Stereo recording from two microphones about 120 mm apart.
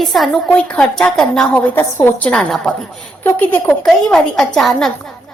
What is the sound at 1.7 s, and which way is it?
A woman's voice, 20° left (ahead or behind).